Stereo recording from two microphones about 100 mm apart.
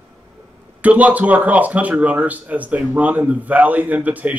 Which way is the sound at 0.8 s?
15° right (ahead or behind).